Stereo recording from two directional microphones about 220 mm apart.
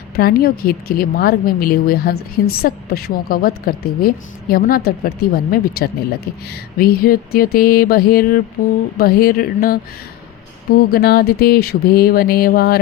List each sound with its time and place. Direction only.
0.2 s a woman's voice: 45° left (ahead or behind)